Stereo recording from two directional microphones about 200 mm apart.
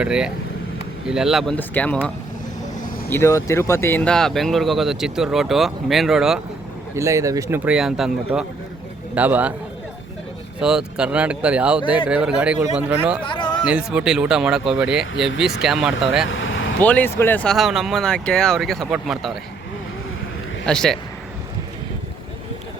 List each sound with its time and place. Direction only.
0.0 s speech: 5° right (ahead or behind)
6.9 s speech: 15° right (ahead or behind)
10.6 s speech: 5° right (ahead or behind)
13.2 s a sound: 25° left (ahead or behind)
13.7 s speech: 5° right (ahead or behind)
16.3 s vehicle: 70° left (ahead or behind)
16.8 s speech: 10° left (ahead or behind)
20.7 s speech: 5° left (ahead or behind)